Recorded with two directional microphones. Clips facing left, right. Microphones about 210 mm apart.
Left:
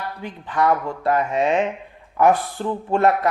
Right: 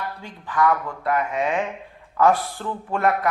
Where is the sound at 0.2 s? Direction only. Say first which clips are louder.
Left 1 dB; 20° left (ahead or behind).